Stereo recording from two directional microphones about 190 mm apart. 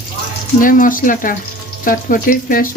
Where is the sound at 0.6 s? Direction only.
45° left (ahead or behind).